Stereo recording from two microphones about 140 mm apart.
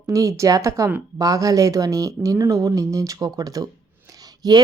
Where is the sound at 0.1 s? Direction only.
20° right (ahead or behind).